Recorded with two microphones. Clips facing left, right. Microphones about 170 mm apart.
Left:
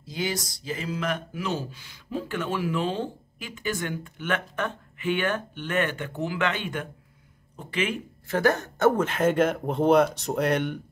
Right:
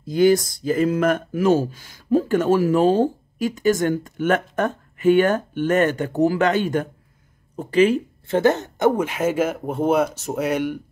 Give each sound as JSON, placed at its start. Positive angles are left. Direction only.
{"t": 0.0, "sound": "speech", "side_deg": -50}